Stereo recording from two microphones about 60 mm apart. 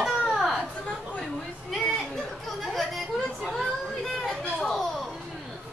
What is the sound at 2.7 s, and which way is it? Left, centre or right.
Chatter, centre.